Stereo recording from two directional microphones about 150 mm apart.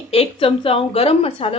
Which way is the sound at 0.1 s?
40° left (ahead or behind).